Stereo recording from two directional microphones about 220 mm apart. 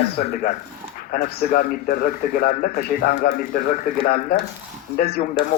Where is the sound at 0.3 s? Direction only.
40° left (ahead or behind).